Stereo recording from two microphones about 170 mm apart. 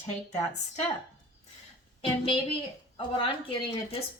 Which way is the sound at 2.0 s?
35° left (ahead or behind).